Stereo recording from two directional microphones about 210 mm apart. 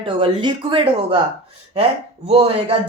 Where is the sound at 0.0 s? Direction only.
25° right (ahead or behind).